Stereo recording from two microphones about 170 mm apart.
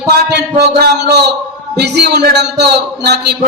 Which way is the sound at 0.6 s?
70° right (ahead or behind).